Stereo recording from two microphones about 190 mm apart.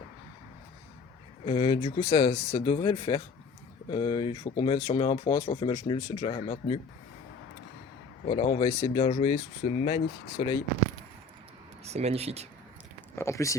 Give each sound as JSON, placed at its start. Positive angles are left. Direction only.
{"t": 1.5, "sound": "speech", "side_deg": 25}
{"t": 8.3, "sound": "speech", "side_deg": 25}
{"t": 11.9, "sound": "speech", "side_deg": -35}
{"t": 13.1, "sound": "speech", "side_deg": 15}